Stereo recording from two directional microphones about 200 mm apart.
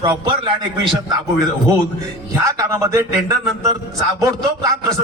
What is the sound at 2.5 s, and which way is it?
A man's voice, 15° right (ahead or behind).